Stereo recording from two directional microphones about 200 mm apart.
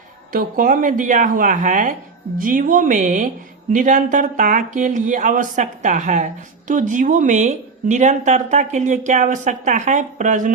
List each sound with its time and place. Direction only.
0.3 s speech: 45° right (ahead or behind)